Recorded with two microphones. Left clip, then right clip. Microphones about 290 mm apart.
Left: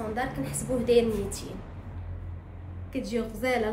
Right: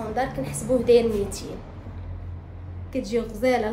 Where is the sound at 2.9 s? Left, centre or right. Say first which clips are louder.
Right 5 dB; centre.